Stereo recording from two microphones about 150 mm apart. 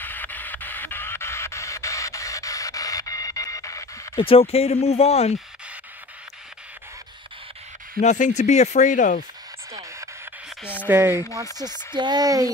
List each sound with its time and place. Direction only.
0.0 s music: 10° left (ahead or behind)
4.2 s speech: 40° left (ahead or behind)
8.0 s speech: 50° left (ahead or behind)
9.7 s a sound: 20° right (ahead or behind)
10.9 s speech: 15° right (ahead or behind)
11.5 s speech: 30° right (ahead or behind)